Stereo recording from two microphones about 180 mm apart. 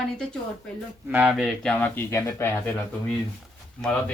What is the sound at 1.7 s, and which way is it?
Speech, 10° left (ahead or behind).